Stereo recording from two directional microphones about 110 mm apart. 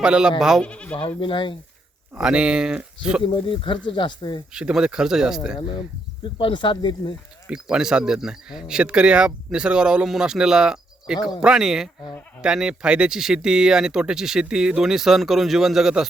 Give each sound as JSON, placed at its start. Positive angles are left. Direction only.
{"t": 0.0, "sound": "speech", "side_deg": -5}
{"t": 0.6, "sound": "speech", "side_deg": 10}
{"t": 1.2, "sound": "speech", "side_deg": 50}
{"t": 2.1, "sound": "speech", "side_deg": -10}
{"t": 3.2, "sound": "speech", "side_deg": 50}
{"t": 4.5, "sound": "speech", "side_deg": -5}
{"t": 5.5, "sound": "speech", "side_deg": 45}
{"t": 7.5, "sound": "speech", "side_deg": -5}